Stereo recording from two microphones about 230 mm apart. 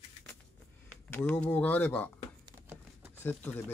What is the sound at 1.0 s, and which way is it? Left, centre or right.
Speech, centre.